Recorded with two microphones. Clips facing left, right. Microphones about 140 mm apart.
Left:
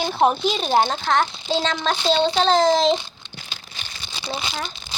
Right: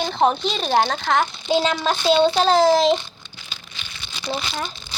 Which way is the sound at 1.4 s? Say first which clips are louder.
Right 3 dB; 10° right (ahead or behind).